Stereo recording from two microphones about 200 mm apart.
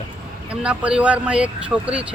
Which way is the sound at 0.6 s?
5° right (ahead or behind).